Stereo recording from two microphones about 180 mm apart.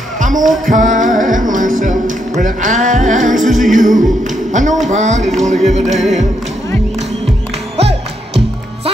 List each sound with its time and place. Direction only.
0.2 s music: 45° right (ahead or behind)
4.5 s speech: 45° right (ahead or behind)
5.9 s music: centre (ahead or behind)